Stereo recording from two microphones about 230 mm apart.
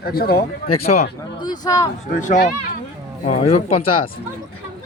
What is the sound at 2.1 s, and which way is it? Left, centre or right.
Speech, left.